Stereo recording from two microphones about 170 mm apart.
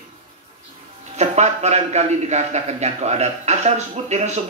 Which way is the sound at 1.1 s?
40° right (ahead or behind).